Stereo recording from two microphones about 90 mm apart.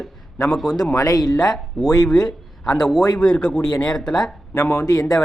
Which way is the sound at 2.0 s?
5° left (ahead or behind).